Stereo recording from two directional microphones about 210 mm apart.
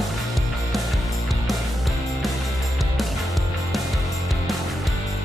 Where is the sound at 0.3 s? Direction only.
Centre (ahead or behind).